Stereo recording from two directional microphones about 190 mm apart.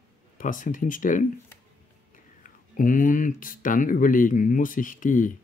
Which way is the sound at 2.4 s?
45° left (ahead or behind).